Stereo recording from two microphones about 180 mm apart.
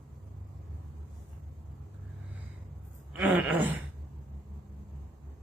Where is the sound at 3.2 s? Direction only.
10° right (ahead or behind).